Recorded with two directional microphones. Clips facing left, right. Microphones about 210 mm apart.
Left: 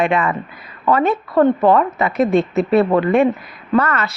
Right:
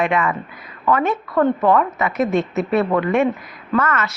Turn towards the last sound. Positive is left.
turn(degrees=35)  # may be behind; listen again after turning